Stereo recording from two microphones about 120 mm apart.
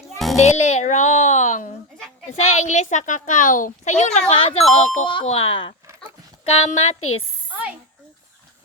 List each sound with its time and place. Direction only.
0.3 s speech: 65° left (ahead or behind)
2.3 s a child's voice: 65° left (ahead or behind)
4.3 s speech: 50° left (ahead or behind)
4.7 s speech: 65° left (ahead or behind)
5.2 s speech: 55° left (ahead or behind)
6.4 s a woman's voice: 60° left (ahead or behind)